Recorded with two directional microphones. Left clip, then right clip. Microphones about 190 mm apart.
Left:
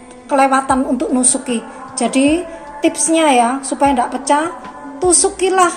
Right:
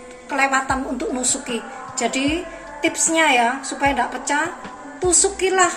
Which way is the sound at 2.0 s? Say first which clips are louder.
Left 7 dB; 35° left (ahead or behind).